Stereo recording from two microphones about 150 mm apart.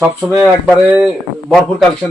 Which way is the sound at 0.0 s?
10° right (ahead or behind).